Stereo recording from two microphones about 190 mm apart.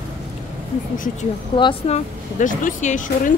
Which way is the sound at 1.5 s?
30° left (ahead or behind).